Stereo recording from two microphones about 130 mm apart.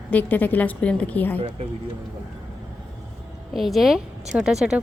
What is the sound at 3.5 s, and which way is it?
A woman's voice, centre (ahead or behind).